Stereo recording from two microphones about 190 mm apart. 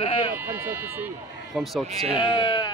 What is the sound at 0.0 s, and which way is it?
Bleat, 30° left (ahead or behind).